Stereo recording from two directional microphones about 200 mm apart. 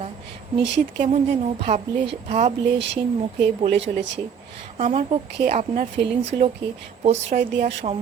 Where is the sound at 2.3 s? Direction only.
35° right (ahead or behind).